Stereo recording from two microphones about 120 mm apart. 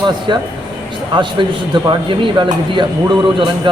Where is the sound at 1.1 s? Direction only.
40° right (ahead or behind).